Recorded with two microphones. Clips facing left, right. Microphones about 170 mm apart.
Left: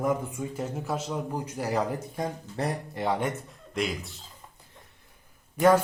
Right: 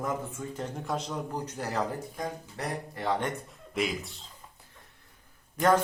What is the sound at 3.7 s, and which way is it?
Speech, centre (ahead or behind).